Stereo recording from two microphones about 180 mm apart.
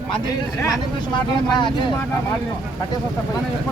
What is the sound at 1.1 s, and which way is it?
Speech, 25° left (ahead or behind).